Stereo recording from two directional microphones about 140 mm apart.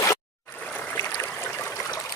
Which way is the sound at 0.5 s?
10° left (ahead or behind).